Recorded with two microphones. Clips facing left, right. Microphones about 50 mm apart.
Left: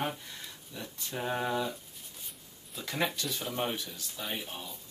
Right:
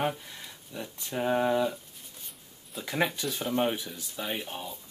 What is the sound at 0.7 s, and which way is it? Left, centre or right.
Speech, centre.